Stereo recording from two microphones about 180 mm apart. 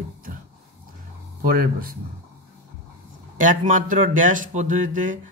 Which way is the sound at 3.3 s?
45° right (ahead or behind).